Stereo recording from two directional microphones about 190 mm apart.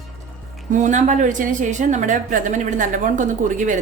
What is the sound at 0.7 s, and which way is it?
A woman's voice, 40° right (ahead or behind).